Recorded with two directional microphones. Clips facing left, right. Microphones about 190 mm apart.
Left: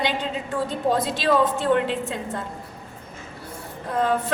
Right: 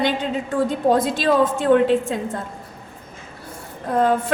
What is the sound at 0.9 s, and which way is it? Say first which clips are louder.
Speech: right 3 dB; 50° right (ahead or behind).